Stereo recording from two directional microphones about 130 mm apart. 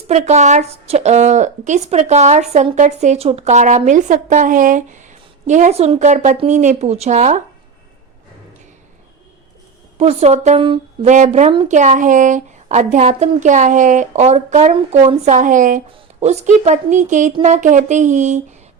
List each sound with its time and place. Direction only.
0.1 s a woman's voice: 60° right (ahead or behind)
10.0 s a woman's voice: 55° right (ahead or behind); by 15.8 s 90° right
16.2 s a woman's voice: 60° right (ahead or behind)